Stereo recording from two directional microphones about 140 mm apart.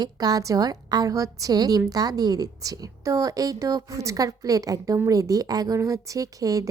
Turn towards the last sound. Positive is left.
turn(degrees=-25)  # may be behind; listen again after turning